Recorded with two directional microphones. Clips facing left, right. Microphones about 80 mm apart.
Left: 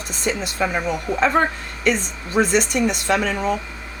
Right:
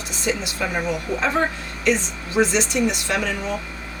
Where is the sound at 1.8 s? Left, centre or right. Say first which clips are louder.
Even; left.